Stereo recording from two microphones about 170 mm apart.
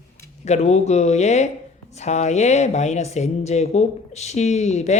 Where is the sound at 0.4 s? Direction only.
40° left (ahead or behind).